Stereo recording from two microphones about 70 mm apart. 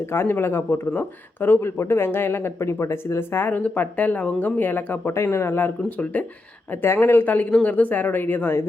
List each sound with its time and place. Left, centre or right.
0.0 s a woman's voice: left
5.0 s a woman's voice: left